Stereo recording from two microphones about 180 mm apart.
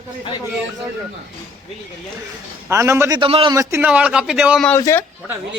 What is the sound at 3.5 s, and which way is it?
A man's voice, 15° right (ahead or behind).